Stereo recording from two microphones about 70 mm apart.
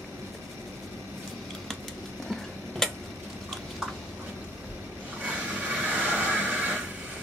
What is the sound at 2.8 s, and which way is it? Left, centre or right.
Tick-tock, centre.